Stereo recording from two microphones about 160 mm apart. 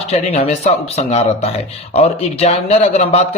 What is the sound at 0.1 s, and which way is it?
Speech, 40° left (ahead or behind).